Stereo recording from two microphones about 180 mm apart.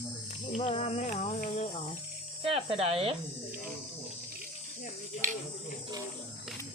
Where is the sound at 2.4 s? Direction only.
30° right (ahead or behind).